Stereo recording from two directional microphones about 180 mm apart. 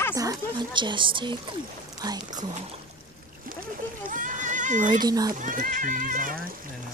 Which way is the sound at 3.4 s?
50° right (ahead or behind).